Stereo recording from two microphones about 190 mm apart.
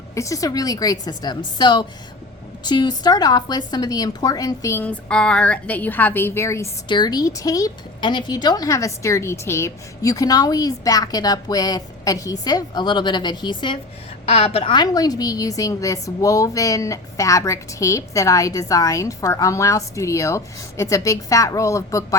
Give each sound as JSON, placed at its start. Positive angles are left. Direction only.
{"t": 0.1, "sound": "a woman's voice", "side_deg": 15}